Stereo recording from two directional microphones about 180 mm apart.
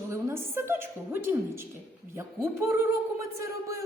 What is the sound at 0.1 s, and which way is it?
A woman's voice, 15° right (ahead or behind).